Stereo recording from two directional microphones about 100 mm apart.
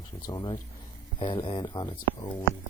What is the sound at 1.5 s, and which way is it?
Speech, 45° left (ahead or behind).